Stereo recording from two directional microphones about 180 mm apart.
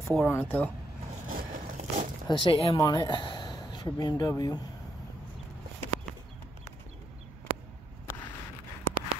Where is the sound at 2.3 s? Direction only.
30° left (ahead or behind).